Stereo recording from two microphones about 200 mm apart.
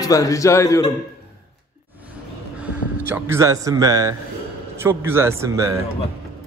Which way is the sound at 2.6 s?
10° right (ahead or behind).